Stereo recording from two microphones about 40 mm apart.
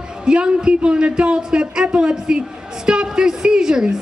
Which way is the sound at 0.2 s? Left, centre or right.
Right.